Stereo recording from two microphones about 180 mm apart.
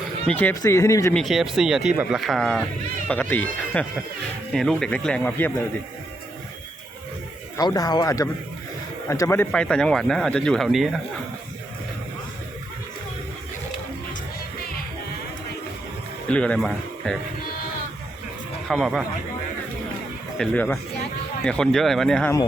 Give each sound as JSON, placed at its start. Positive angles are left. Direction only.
{"t": 0.3, "sound": "speech", "side_deg": 10}
{"t": 1.1, "sound": "speech", "side_deg": 0}
{"t": 7.5, "sound": "speech", "side_deg": 20}
{"t": 16.3, "sound": "speech", "side_deg": 5}
{"t": 18.7, "sound": "speech", "side_deg": 0}
{"t": 20.4, "sound": "speech", "side_deg": 5}